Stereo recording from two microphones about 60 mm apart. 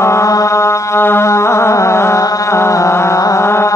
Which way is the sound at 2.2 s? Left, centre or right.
Left.